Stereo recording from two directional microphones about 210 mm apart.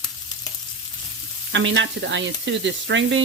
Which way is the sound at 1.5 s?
60° right (ahead or behind).